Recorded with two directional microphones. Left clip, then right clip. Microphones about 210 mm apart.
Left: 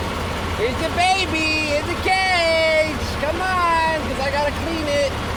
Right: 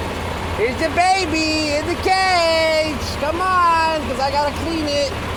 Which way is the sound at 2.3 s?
35° right (ahead or behind).